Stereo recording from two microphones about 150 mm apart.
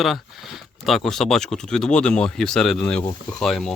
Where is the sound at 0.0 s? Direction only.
Centre (ahead or behind).